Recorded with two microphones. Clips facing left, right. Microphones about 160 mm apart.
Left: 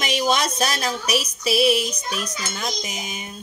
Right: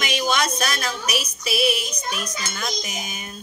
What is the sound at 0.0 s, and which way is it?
Music, 30° left (ahead or behind).